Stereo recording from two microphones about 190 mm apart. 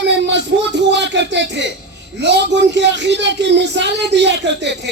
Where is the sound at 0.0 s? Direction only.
65° right (ahead or behind).